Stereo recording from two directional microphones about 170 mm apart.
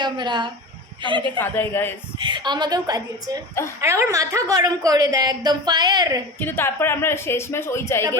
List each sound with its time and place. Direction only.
0.0 s a woman's voice: 25° right (ahead or behind)
1.4 s speech: 10° left (ahead or behind)
2.2 s a woman's voice: 25° right (ahead or behind)
6.4 s speech: 10° left (ahead or behind)